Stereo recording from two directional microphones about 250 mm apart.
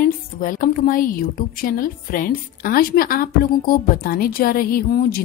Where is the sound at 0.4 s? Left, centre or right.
Left.